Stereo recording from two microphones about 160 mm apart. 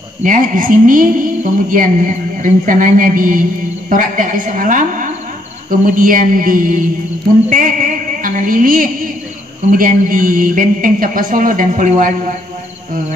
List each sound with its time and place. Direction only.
0.2 s a man's voice: 55° right (ahead or behind)
7.4 s music: 55° right (ahead or behind)
9.7 s a man's voice: 60° right (ahead or behind)